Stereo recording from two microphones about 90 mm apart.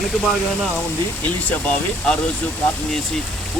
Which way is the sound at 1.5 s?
15° left (ahead or behind).